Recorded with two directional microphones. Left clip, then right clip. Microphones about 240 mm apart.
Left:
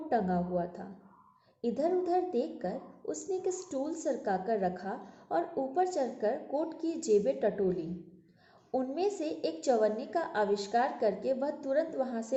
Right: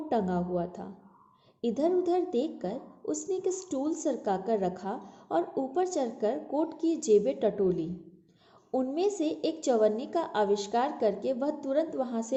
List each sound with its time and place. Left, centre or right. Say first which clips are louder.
0.1 s a woman's voice: right 1 dB; right